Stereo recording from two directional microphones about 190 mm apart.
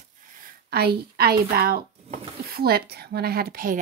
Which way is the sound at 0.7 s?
55° right (ahead or behind).